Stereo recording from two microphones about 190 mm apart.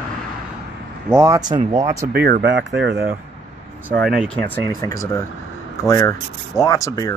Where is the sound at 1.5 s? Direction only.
35° right (ahead or behind).